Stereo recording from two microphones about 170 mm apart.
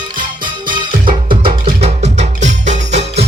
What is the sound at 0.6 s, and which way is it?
Music, 25° right (ahead or behind).